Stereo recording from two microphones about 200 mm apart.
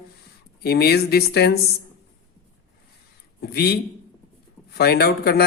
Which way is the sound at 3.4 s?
50° left (ahead or behind).